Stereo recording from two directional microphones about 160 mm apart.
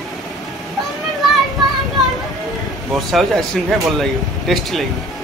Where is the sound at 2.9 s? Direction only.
Centre (ahead or behind).